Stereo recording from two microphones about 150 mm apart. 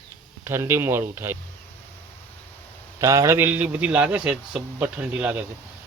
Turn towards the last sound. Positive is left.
turn(degrees=-10)  # may be behind; listen again after turning